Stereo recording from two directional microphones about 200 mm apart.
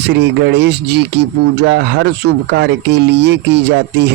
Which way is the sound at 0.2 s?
60° right (ahead or behind).